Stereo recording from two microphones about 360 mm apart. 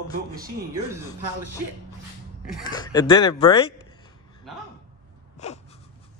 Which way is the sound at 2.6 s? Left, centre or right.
Centre.